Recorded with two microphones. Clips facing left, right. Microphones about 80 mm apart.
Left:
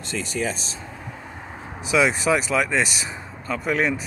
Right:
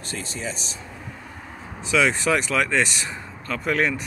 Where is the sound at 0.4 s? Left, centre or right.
Left.